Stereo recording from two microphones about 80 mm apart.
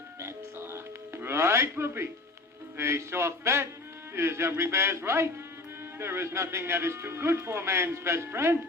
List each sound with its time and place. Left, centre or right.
0.2 s music: right
2.7 s speech: right